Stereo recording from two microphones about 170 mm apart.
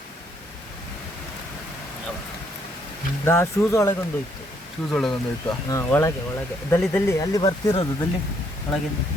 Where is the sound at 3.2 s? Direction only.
15° left (ahead or behind).